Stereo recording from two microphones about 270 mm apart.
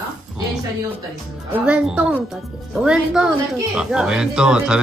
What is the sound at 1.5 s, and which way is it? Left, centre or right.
Speech, centre.